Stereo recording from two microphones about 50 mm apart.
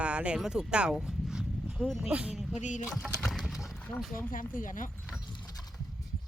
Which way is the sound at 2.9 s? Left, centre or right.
Centre.